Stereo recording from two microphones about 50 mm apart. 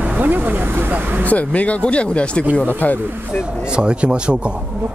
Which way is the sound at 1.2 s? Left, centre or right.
Left.